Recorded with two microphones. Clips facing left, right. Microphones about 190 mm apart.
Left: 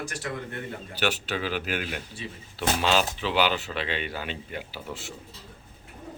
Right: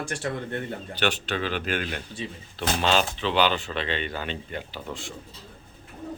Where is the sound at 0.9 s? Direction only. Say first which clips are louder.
Right 1 dB; 5° left (ahead or behind).